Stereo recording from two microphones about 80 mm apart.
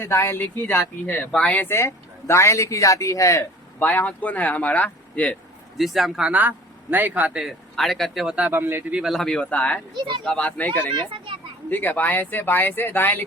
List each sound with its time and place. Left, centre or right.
0.0 s speech: left
1.0 s speech: centre
1.5 s speech: left
3.8 s speech: centre
5.7 s speech: centre
6.2 s a man's voice: right
7.3 s speech: centre
8.4 s a man's voice: right
9.0 s speech: centre
11.7 s speech: left